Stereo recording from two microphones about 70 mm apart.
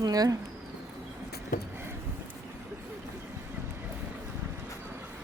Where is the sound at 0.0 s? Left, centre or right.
Right.